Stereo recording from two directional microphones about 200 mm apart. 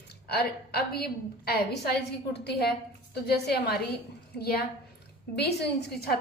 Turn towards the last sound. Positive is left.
turn(degrees=55)  # may be behind; listen again after turning